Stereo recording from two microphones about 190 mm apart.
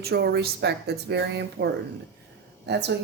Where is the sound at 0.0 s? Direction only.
60° right (ahead or behind).